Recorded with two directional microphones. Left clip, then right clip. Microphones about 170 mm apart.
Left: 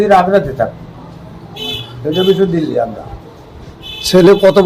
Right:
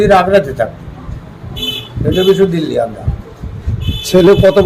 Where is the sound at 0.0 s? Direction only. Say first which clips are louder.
Right 1 dB; 35° right (ahead or behind).